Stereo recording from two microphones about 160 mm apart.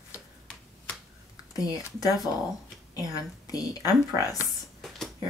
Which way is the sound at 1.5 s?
25° left (ahead or behind).